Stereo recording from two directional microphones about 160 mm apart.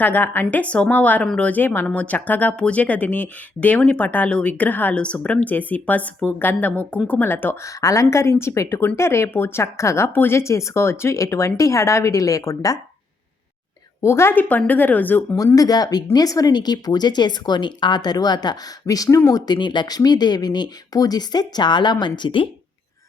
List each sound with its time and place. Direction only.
0.0 s speech: 10° left (ahead or behind)
14.0 s speech: 15° left (ahead or behind)
15.4 s speech: 20° left (ahead or behind)